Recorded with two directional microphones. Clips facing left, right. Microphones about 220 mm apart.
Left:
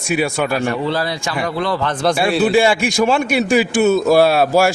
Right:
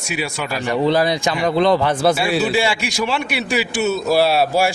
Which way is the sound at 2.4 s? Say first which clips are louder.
Left 5 dB; 50° left (ahead or behind).